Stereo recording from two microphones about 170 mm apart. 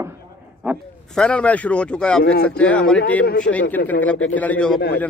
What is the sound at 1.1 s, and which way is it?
A man's voice, 5° left (ahead or behind).